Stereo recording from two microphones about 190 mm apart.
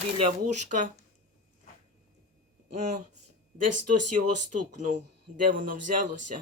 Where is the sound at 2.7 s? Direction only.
40° right (ahead or behind).